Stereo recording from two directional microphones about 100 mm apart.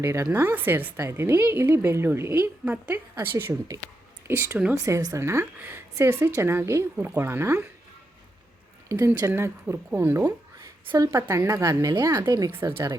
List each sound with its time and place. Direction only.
0.0 s a woman's voice: 30° right (ahead or behind)
8.9 s a woman's voice: 30° right (ahead or behind)